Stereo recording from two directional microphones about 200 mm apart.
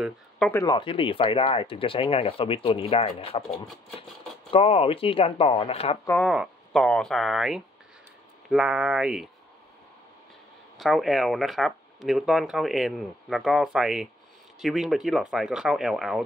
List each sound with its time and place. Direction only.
0.5 s speech: 20° left (ahead or behind)
4.5 s speech: 30° left (ahead or behind)
6.0 s speech: 5° left (ahead or behind)
10.8 s speech: centre (ahead or behind)